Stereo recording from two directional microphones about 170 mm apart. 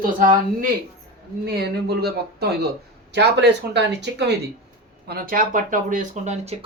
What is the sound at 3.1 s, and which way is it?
Speech, 90° right.